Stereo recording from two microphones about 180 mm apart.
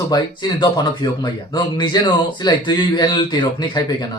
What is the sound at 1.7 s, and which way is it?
Speech, 25° left (ahead or behind).